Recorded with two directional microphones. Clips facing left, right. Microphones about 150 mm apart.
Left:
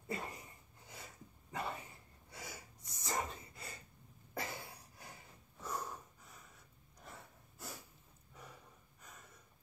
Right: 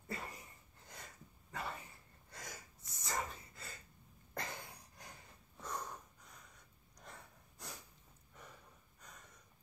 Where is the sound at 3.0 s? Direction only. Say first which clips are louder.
Left 2 dB; 20° left (ahead or behind).